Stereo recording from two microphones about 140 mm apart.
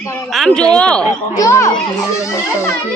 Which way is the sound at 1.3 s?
20° left (ahead or behind).